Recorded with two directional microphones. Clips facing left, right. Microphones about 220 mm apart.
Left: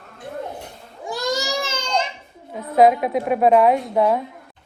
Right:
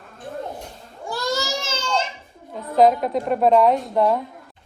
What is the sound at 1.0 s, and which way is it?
Baby cry, 15° left (ahead or behind).